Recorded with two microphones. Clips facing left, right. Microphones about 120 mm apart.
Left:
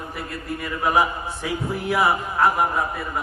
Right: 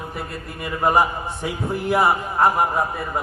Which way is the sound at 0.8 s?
Centre (ahead or behind).